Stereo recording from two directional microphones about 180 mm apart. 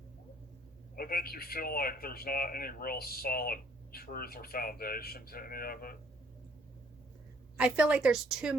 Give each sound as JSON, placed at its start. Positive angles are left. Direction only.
{"t": 0.9, "sound": "speech", "side_deg": 55}
{"t": 7.5, "sound": "a woman's voice", "side_deg": -5}